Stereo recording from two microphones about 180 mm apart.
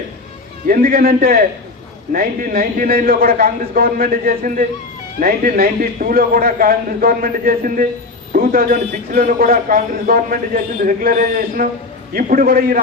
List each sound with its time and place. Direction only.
0.7 s a man's voice: 55° right (ahead or behind)